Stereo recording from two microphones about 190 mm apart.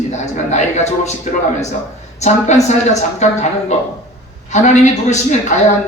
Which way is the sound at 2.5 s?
35° left (ahead or behind).